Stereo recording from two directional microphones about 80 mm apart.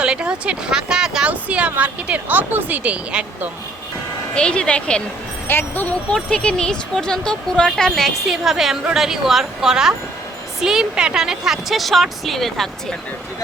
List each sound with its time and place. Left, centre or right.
0.0 s speech: centre
4.4 s speech: centre
5.5 s speech: left
6.1 s speech: centre